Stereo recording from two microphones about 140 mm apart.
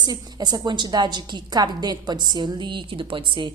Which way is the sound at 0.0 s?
30° right (ahead or behind).